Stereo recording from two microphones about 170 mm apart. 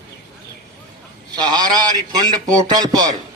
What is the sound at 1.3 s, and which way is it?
A man's voice, 25° right (ahead or behind).